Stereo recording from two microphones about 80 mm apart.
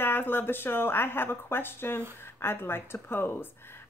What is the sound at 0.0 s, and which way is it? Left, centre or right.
Speech, left.